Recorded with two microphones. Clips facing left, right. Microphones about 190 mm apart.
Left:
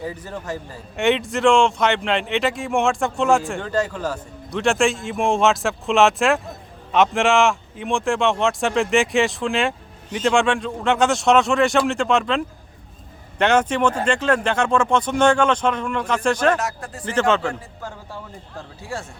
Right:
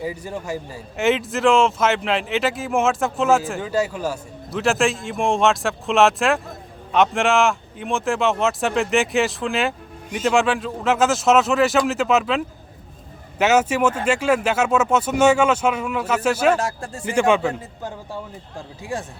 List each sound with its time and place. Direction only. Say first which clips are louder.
0.0 s a man's voice: right 2 dB; 10° right (ahead or behind)
16.6 s speech: right 2 dB; 30° right (ahead or behind)
17.1 s speech: right 2 dB; 10° right (ahead or behind)